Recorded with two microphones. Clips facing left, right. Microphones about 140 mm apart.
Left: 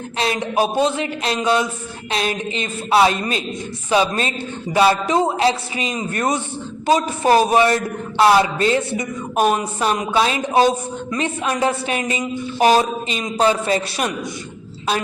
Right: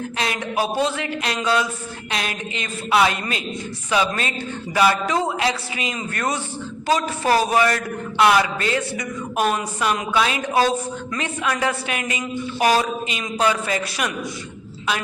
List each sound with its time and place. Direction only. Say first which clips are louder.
0.2 s a woman's voice: left 5 dB; 25° left (ahead or behind)